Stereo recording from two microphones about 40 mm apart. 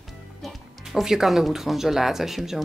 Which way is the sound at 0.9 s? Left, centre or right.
Centre.